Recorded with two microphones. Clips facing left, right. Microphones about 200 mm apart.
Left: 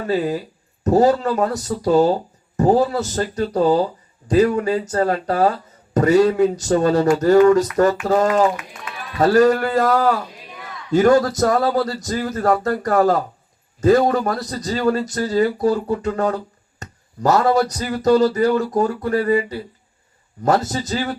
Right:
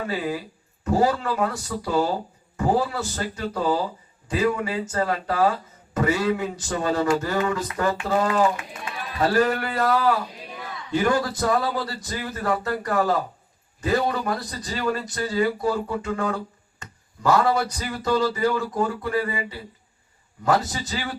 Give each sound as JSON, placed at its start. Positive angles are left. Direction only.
{"t": 0.0, "sound": "speech", "side_deg": 40}